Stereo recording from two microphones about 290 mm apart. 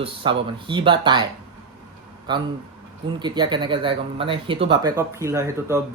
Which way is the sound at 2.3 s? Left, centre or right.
Centre.